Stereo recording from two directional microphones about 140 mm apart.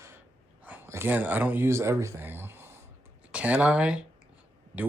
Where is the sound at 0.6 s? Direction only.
15° right (ahead or behind).